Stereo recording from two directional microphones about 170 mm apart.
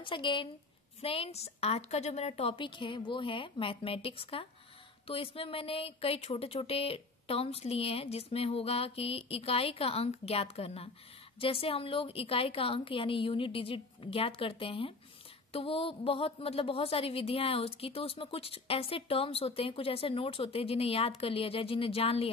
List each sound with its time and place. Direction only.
0.0 s a woman's voice: 30° left (ahead or behind)